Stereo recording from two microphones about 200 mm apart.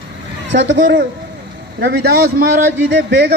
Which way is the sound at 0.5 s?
65° right (ahead or behind).